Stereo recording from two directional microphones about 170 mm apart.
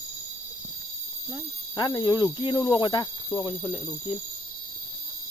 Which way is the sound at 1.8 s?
25° left (ahead or behind).